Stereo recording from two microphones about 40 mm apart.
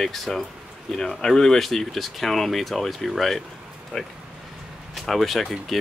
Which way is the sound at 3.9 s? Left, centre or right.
Centre.